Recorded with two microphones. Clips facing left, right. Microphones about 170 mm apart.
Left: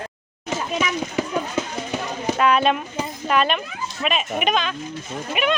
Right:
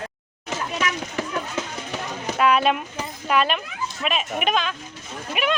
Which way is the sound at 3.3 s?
5° right (ahead or behind).